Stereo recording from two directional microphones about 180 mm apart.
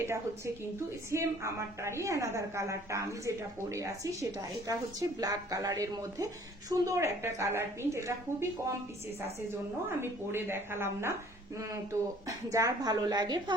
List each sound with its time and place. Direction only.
0.0 s a woman's voice: 15° right (ahead or behind)
10.0 s a woman's voice: 15° right (ahead or behind)
12.5 s a woman's voice: 20° right (ahead or behind)